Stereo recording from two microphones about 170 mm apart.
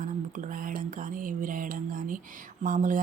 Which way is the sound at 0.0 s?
50° right (ahead or behind).